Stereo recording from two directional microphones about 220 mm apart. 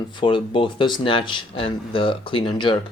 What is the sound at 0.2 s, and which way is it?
Speech, 20° left (ahead or behind).